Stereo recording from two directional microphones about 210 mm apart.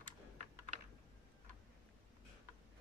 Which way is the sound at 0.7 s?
35° right (ahead or behind).